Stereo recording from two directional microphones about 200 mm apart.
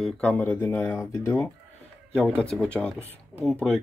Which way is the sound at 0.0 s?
10° left (ahead or behind).